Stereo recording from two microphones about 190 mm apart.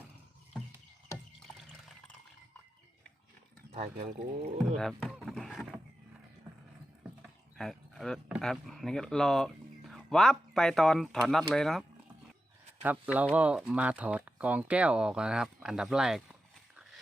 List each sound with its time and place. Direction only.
3.8 s speech: 35° right (ahead or behind)
4.7 s speech: centre (ahead or behind)
5.2 s boat: centre (ahead or behind)
7.6 s speech: centre (ahead or behind)
12.8 s speech: 10° right (ahead or behind)